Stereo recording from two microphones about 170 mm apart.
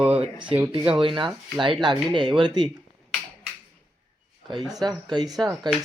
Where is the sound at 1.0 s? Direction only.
30° right (ahead or behind).